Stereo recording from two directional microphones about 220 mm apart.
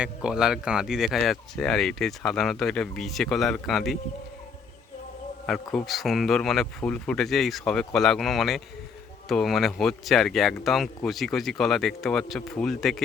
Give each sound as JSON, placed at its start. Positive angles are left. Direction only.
{"t": 0.0, "sound": "speech", "side_deg": -5}
{"t": 5.5, "sound": "speech", "side_deg": 0}